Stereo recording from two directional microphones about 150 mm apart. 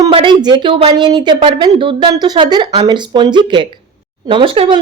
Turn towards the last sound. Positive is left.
turn(degrees=-35)  # may be behind; listen again after turning